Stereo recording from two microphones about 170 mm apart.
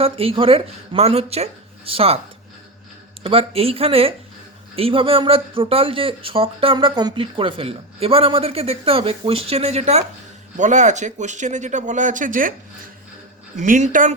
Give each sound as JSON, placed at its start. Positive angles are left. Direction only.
{"t": 0.0, "sound": "speech", "side_deg": -35}
{"t": 3.2, "sound": "speech", "side_deg": -35}
{"t": 13.6, "sound": "speech", "side_deg": -45}